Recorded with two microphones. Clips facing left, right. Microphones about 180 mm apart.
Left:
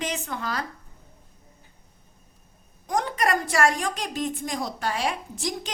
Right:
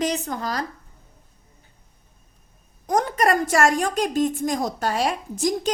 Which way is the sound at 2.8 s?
45° right (ahead or behind).